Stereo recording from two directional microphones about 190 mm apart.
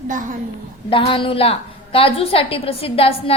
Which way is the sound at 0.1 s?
45° right (ahead or behind).